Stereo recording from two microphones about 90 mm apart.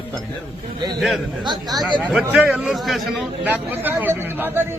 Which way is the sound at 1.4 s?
50° right (ahead or behind).